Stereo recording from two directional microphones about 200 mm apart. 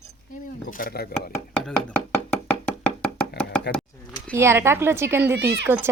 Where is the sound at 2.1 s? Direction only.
10° left (ahead or behind).